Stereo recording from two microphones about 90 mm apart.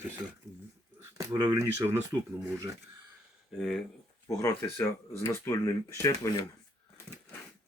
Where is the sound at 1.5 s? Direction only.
30° right (ahead or behind).